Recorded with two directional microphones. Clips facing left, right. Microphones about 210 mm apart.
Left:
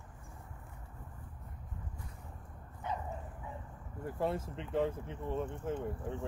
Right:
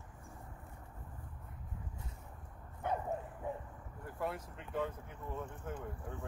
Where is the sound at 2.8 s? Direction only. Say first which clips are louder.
Right 3 dB; 55° right (ahead or behind).